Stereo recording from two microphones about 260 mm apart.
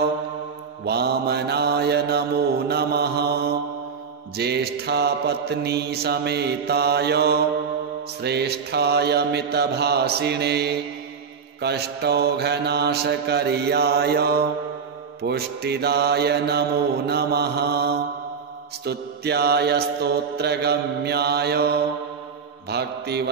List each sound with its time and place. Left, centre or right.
0.8 s mantra: right
4.4 s mantra: right